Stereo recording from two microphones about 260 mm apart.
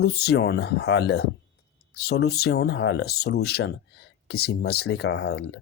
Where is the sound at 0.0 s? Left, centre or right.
Left.